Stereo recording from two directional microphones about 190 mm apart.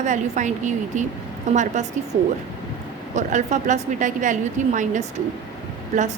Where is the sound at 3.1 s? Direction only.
40° right (ahead or behind).